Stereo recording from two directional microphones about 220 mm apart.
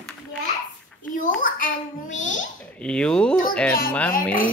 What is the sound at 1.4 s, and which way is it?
A child's voice, 40° left (ahead or behind).